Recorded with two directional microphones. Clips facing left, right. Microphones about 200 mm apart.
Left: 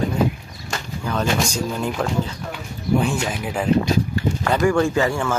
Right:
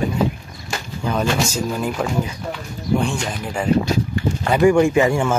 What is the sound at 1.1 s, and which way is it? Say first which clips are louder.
Speech: right 1 dB; 5° right (ahead or behind).